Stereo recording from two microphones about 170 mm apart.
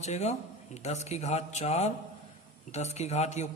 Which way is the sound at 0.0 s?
40° left (ahead or behind).